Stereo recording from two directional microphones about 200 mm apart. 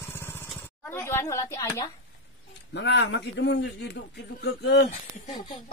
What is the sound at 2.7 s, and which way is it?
A woman's voice, 60° left (ahead or behind).